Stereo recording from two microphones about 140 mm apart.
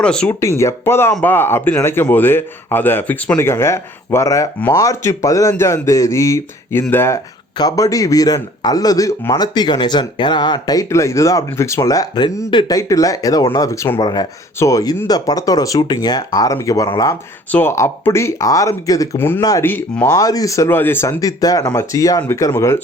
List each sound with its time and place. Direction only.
0.0 s a man's voice: 5° left (ahead or behind)
0.3 s a man's voice: 20° left (ahead or behind)
20.1 s a man's voice: 25° left (ahead or behind)